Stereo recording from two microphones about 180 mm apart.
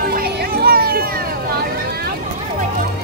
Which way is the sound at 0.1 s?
60° right (ahead or behind).